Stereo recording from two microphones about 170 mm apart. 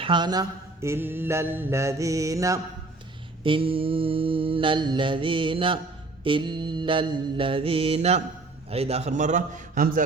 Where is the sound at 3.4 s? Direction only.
30° right (ahead or behind).